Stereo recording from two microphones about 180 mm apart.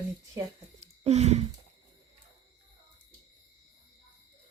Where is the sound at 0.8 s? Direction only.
35° right (ahead or behind).